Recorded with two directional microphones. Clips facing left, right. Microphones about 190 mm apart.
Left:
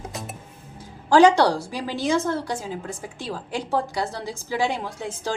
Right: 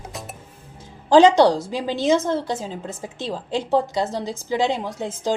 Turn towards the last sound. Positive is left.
turn(degrees=-20)  # may be behind; listen again after turning